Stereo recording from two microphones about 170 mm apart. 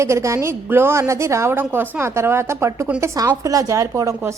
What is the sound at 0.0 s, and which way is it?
A woman's voice, 15° right (ahead or behind).